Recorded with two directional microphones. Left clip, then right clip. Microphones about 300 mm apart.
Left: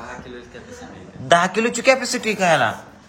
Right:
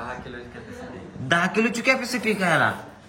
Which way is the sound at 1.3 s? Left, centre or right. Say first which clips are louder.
Left 5 dB; centre.